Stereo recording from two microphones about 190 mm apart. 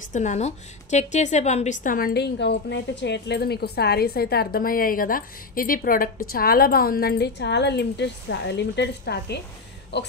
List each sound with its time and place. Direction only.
0.1 s a woman's voice: 40° left (ahead or behind); by 10.1 s 60° left (ahead or behind)